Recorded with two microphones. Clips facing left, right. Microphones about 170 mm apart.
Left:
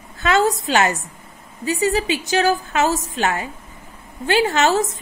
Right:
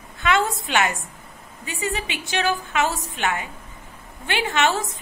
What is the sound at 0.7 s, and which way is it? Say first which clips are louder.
A woman's voice: left 4 dB; 40° left (ahead or behind).